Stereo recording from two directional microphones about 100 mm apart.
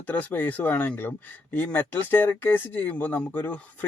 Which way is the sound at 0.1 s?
15° left (ahead or behind).